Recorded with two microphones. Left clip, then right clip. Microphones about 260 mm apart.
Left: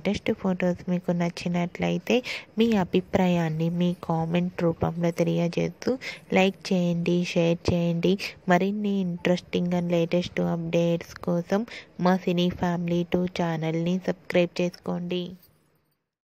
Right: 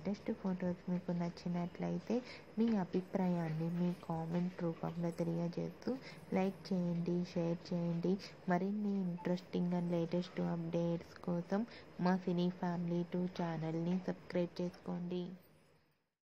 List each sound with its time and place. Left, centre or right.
0.0 s speech: left